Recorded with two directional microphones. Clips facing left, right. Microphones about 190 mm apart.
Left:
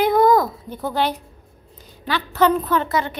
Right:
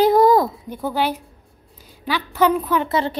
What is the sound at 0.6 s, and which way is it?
A woman's voice, 10° right (ahead or behind).